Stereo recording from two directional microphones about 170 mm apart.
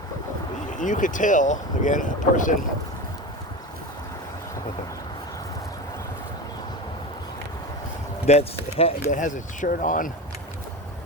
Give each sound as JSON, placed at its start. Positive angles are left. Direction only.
{"t": 0.7, "sound": "speech", "side_deg": 50}
{"t": 8.3, "sound": "speech", "side_deg": 40}